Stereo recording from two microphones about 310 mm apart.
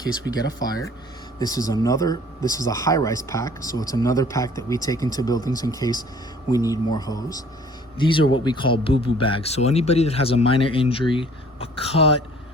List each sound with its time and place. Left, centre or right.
0.3 s speech: centre